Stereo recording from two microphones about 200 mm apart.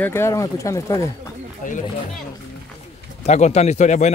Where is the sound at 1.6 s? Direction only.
40° left (ahead or behind).